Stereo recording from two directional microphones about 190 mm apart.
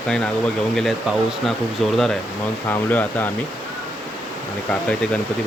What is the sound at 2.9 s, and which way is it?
Speech, 10° left (ahead or behind).